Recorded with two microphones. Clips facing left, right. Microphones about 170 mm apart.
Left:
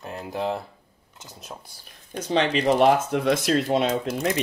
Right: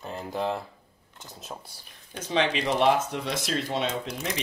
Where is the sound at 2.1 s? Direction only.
40° left (ahead or behind).